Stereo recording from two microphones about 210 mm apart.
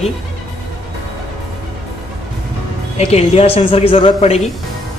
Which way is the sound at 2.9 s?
30° left (ahead or behind).